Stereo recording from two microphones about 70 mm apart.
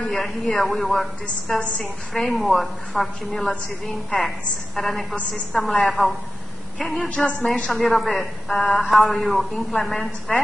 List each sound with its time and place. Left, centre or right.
0.0 s a woman's voice: centre